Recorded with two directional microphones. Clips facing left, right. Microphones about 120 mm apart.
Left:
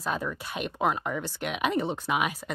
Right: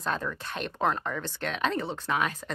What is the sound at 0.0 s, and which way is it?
Speech, 10° left (ahead or behind).